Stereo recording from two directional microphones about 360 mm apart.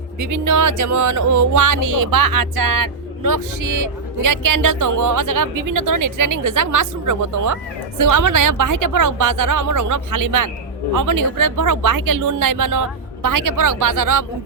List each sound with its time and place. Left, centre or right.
0.2 s speech: right